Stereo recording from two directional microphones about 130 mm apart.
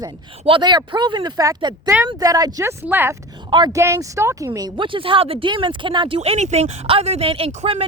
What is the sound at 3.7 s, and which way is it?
Speech, 20° right (ahead or behind).